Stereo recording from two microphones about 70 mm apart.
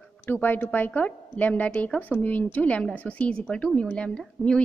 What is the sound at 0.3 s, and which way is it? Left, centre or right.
A woman's voice, left.